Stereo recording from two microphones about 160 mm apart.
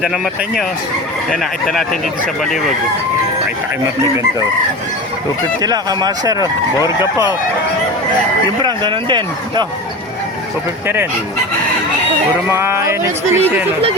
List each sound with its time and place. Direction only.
0.0 s speech: 5° right (ahead or behind)
5.6 s speech: 25° right (ahead or behind)
8.6 s speech: 30° right (ahead or behind)
12.5 s speech: 15° right (ahead or behind)